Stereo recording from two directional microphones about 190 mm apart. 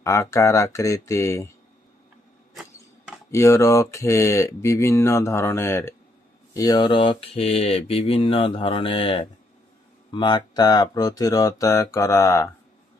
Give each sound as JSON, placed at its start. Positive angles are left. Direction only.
{"t": 0.0, "sound": "speech", "side_deg": 15}
{"t": 3.3, "sound": "speech", "side_deg": 15}